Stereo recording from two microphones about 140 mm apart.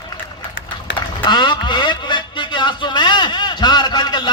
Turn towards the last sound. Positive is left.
turn(degrees=30)  # may be behind; listen again after turning